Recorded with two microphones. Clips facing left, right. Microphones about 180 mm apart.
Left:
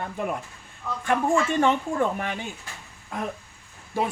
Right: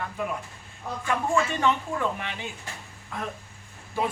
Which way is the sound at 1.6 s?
45° left (ahead or behind).